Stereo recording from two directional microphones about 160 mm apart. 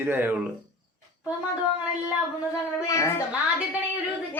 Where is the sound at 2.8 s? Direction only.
15° left (ahead or behind).